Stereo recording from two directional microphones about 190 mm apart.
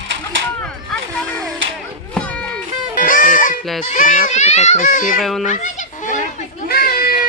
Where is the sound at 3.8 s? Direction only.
40° left (ahead or behind).